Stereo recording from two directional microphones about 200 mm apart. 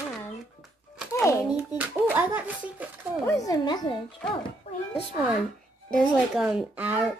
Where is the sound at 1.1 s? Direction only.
15° left (ahead or behind).